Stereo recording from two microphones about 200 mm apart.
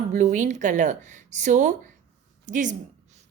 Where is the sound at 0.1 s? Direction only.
40° right (ahead or behind).